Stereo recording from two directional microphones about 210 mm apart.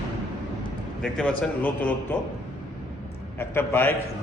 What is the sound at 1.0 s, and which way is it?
Speech, 5° left (ahead or behind).